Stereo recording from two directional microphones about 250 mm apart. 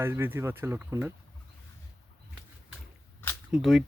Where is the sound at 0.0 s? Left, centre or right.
Centre.